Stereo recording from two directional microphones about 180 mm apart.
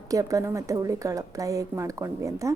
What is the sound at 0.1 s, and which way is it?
A woman's voice, 20° right (ahead or behind).